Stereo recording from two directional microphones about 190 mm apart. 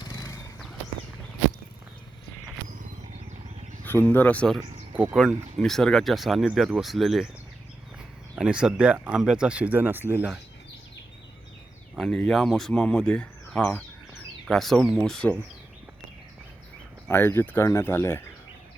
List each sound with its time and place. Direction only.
0.0 s a sound: 20° left (ahead or behind)
3.8 s speech: 10° left (ahead or behind)
8.4 s speech: 5° right (ahead or behind)
11.9 s speech: centre (ahead or behind)
17.1 s speech: 10° left (ahead or behind)